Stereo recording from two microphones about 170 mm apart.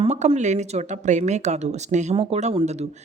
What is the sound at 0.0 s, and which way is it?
Speech, 35° right (ahead or behind).